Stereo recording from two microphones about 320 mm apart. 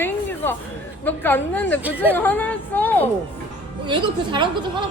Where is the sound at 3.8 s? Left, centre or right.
Centre.